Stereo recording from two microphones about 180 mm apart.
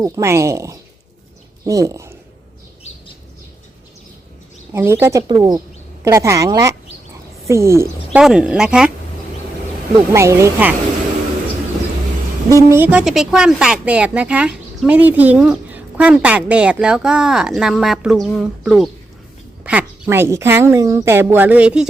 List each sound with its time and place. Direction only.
0.0 s a woman's voice: 15° right (ahead or behind)
4.7 s a woman's voice: 15° right (ahead or behind)
8.2 s a woman's voice: 5° right (ahead or behind)
10.1 s a woman's voice: 15° right (ahead or behind)
12.5 s a woman's voice: 15° right (ahead or behind)